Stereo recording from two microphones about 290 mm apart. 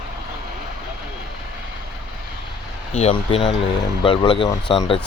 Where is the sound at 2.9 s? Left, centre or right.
Centre.